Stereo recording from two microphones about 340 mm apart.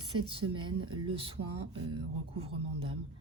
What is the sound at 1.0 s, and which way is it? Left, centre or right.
Speech, centre.